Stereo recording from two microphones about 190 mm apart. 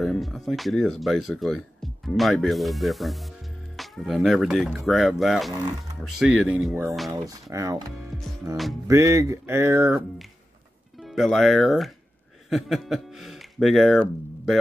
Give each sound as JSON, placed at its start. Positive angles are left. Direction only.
{"t": 0.0, "sound": "speech", "side_deg": 0}
{"t": 11.0, "sound": "speech", "side_deg": 0}